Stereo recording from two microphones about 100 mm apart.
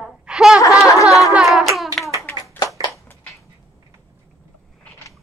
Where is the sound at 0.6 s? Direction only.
30° left (ahead or behind).